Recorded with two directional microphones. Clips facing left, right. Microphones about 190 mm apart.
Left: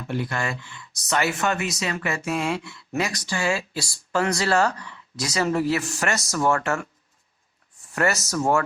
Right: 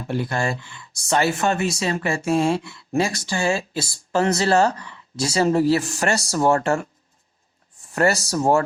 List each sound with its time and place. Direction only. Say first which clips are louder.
0.0 s speech: right 3 dB; 35° right (ahead or behind)
7.9 s speech: right 4 dB; 35° right (ahead or behind)